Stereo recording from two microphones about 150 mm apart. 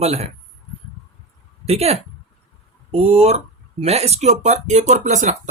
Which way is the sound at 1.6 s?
45° right (ahead or behind).